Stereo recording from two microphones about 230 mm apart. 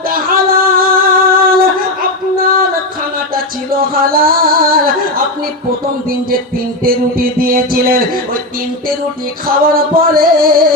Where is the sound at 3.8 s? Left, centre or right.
Right.